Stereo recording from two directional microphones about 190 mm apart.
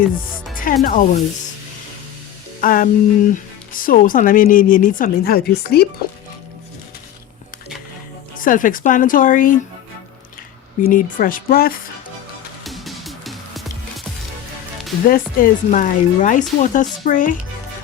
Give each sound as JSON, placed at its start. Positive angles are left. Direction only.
{"t": 0.5, "sound": "speech", "side_deg": 45}
{"t": 2.6, "sound": "speech", "side_deg": 45}
{"t": 8.4, "sound": "speech", "side_deg": 45}
{"t": 10.8, "sound": "speech", "side_deg": 45}
{"t": 12.6, "sound": "music", "side_deg": 0}
{"t": 15.1, "sound": "speech", "side_deg": 45}